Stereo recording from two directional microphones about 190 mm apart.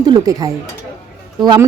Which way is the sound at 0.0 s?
20° right (ahead or behind).